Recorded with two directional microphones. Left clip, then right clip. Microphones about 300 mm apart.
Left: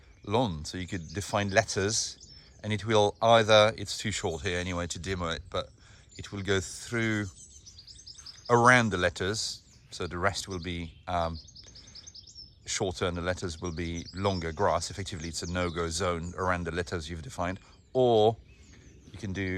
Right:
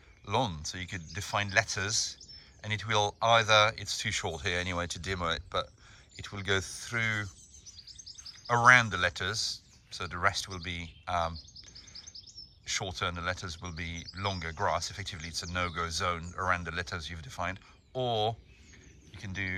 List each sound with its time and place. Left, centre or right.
0.3 s speech: centre
8.2 s bird vocalization: centre
10.0 s speech: centre
12.6 s speech: centre